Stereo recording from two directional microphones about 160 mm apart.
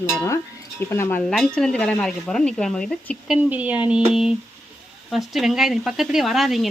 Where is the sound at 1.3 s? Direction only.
5° left (ahead or behind).